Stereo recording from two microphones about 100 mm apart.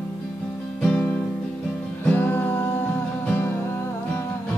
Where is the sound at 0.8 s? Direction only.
15° left (ahead or behind).